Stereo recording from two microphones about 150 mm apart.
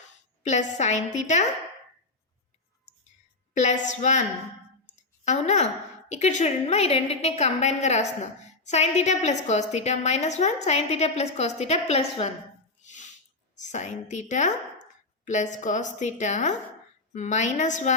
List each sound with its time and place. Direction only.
0.4 s a woman's voice: 50° left (ahead or behind)
3.5 s a woman's voice: 50° left (ahead or behind)
5.2 s a woman's voice: 50° left (ahead or behind)
12.8 s a sound: 55° left (ahead or behind)
13.6 s a woman's voice: 50° left (ahead or behind)